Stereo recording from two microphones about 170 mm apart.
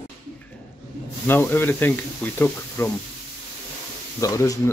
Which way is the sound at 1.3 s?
10° left (ahead or behind).